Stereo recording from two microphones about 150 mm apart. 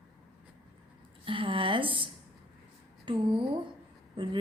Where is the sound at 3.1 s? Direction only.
35° right (ahead or behind).